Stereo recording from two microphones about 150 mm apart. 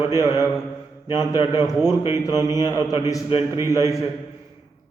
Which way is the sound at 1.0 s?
30° left (ahead or behind).